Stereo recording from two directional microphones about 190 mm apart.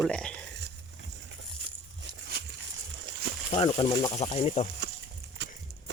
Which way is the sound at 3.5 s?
25° left (ahead or behind).